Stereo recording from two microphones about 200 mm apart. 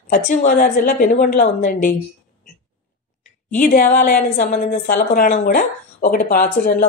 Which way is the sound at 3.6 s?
40° left (ahead or behind).